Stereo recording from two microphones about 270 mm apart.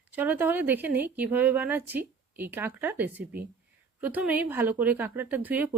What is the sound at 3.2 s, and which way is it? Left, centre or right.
Speech, right.